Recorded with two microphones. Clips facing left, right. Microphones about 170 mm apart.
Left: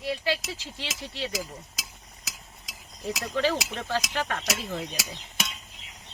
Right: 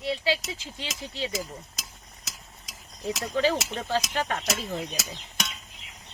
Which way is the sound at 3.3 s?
15° right (ahead or behind).